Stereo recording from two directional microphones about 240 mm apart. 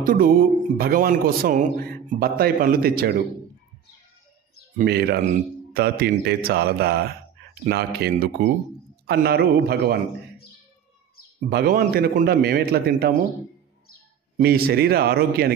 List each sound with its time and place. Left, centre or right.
0.0 s speech: right
4.7 s speech: right
11.4 s speech: right
14.4 s speech: right